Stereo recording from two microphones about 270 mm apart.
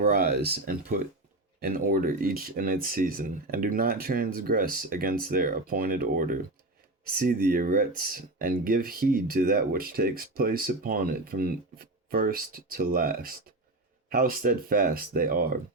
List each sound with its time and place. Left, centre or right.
0.0 s speech: right